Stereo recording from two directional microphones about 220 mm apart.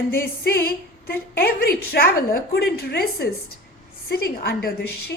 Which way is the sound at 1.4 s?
45° left (ahead or behind).